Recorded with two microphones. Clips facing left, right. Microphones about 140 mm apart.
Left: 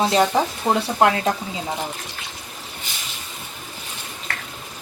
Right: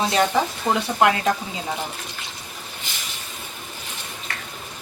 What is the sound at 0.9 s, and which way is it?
Speech, 25° left (ahead or behind).